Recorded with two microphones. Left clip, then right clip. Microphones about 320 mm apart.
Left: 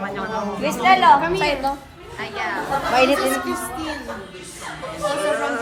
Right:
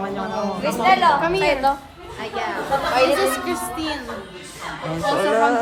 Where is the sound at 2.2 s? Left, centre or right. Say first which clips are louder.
Even; centre.